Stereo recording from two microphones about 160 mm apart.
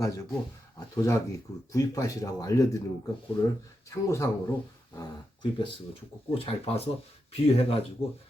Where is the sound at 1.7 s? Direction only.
20° left (ahead or behind).